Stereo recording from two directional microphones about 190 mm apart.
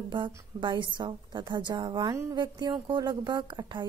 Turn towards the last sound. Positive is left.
turn(degrees=-25)  # may be behind; listen again after turning